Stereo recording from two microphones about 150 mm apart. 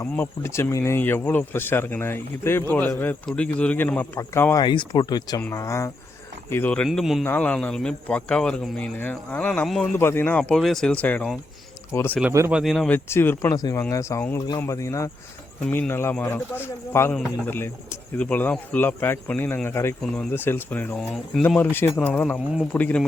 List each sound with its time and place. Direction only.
0.0 s speech: 15° left (ahead or behind)
4.6 s speech: 30° left (ahead or behind); by 7.3 s centre (ahead or behind)
7.3 s speech: 10° left (ahead or behind)
10.0 s speech: 15° left (ahead or behind)
10.5 s speech: centre (ahead or behind)
12.5 s speech: 5° right (ahead or behind)
12.9 s speech: 15° left (ahead or behind)